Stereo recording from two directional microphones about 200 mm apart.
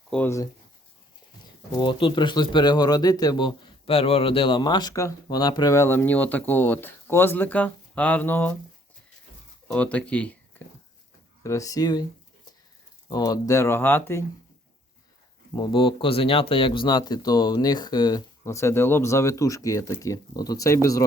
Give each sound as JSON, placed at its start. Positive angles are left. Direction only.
{"t": 0.1, "sound": "speech", "side_deg": 10}
{"t": 1.7, "sound": "speech", "side_deg": 25}
{"t": 9.6, "sound": "speech", "side_deg": 5}
{"t": 11.4, "sound": "speech", "side_deg": 15}
{"t": 13.1, "sound": "speech", "side_deg": 20}
{"t": 15.5, "sound": "speech", "side_deg": 25}